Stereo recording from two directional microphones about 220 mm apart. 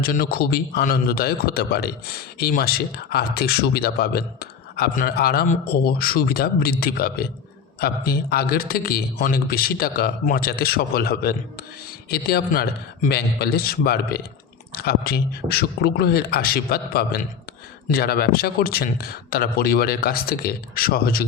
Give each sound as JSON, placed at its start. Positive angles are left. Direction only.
{"t": 0.0, "sound": "speech", "side_deg": 45}